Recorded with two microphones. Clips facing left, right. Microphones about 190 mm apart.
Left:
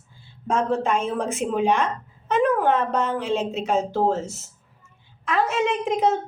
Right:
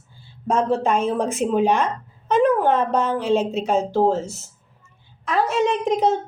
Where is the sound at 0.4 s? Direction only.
35° right (ahead or behind).